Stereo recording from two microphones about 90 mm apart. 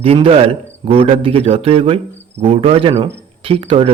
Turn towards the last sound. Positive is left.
turn(degrees=-75)  # may be behind; listen again after turning